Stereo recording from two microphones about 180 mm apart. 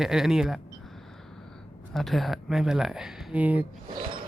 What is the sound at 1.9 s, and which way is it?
Speech, centre (ahead or behind).